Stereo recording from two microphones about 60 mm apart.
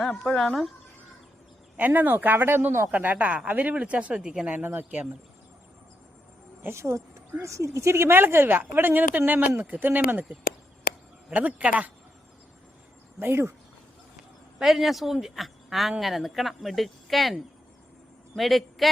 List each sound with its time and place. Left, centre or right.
0.2 s speech: centre
1.7 s a woman's voice: right
2.9 s speech: right
4.6 s speech: right
6.6 s speech: right
6.8 s a woman's voice: right
11.3 s speech: right
13.1 s speech: right
14.6 s speech: centre